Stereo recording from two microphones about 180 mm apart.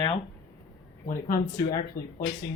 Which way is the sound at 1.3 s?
55° left (ahead or behind).